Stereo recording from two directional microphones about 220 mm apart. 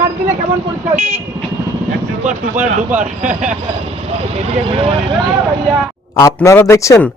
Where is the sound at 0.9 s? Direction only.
30° right (ahead or behind).